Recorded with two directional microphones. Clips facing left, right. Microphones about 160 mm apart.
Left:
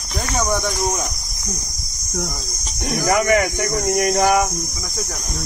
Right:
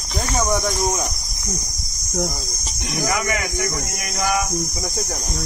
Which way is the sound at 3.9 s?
30° left (ahead or behind).